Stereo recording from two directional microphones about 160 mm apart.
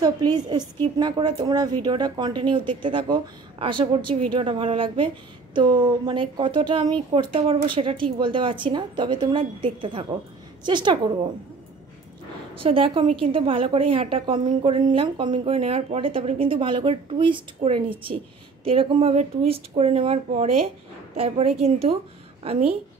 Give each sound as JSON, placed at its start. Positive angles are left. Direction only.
{"t": 0.0, "sound": "a woman's voice", "side_deg": -25}
{"t": 12.6, "sound": "a woman's voice", "side_deg": -35}